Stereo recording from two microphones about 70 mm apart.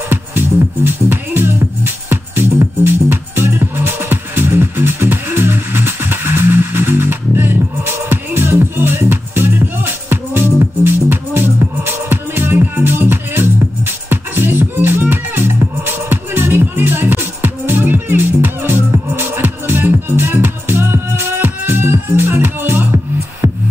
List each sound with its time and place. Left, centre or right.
0.1 s music: right